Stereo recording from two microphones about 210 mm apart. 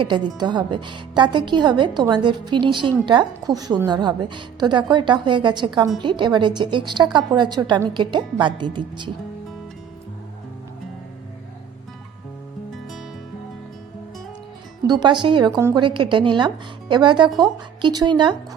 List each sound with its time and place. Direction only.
0.0 s a woman's voice: 20° right (ahead or behind)
14.8 s a woman's voice: 20° right (ahead or behind)